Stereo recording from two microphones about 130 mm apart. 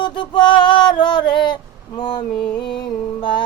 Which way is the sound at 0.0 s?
35° left (ahead or behind).